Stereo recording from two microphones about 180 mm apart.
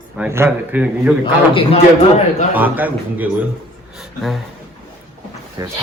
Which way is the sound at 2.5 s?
10° right (ahead or behind).